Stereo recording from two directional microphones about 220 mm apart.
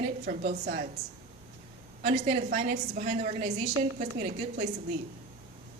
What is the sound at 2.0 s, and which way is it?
A woman's voice, 30° right (ahead or behind).